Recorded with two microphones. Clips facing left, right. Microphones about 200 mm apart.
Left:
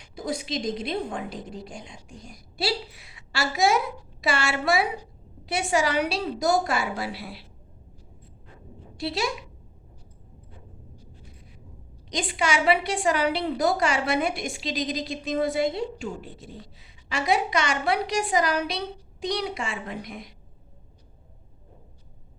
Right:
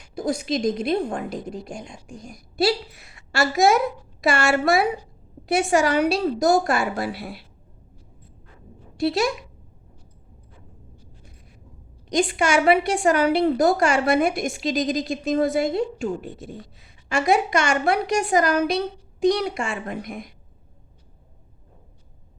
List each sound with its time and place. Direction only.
0.3 s a woman's voice: 45° right (ahead or behind)
9.0 s a woman's voice: 50° right (ahead or behind)
12.0 s a woman's voice: 50° right (ahead or behind)